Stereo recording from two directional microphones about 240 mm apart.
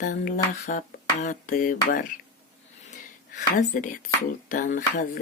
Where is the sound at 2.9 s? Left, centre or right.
Left.